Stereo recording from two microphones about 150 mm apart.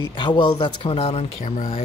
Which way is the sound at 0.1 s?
30° left (ahead or behind).